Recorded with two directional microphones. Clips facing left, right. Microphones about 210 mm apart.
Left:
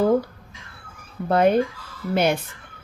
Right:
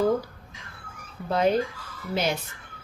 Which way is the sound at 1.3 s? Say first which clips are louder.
Left 5 dB; 55° left (ahead or behind).